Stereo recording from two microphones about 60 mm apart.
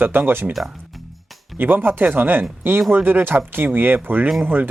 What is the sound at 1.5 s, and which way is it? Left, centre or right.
Speech, right.